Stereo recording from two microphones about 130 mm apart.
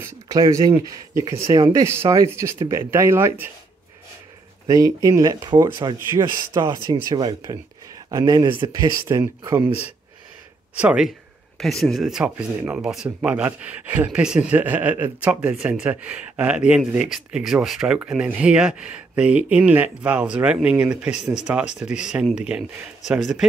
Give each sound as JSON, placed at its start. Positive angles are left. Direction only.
{"t": 0.0, "sound": "speech", "side_deg": -25}
{"t": 4.6, "sound": "speech", "side_deg": -25}
{"t": 5.9, "sound": "speech", "side_deg": -20}
{"t": 9.0, "sound": "speech", "side_deg": -15}
{"t": 10.7, "sound": "speech", "side_deg": -10}